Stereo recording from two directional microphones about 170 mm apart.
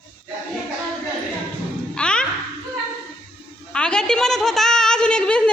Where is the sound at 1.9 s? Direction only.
5° left (ahead or behind).